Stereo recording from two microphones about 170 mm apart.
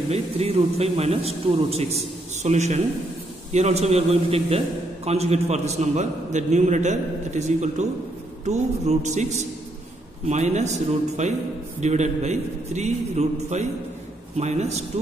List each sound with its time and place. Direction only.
0.1 s a man's voice: 35° right (ahead or behind)